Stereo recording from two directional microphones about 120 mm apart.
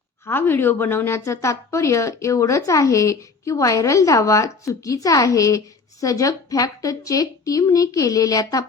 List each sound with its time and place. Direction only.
0.3 s a woman's voice: 20° left (ahead or behind)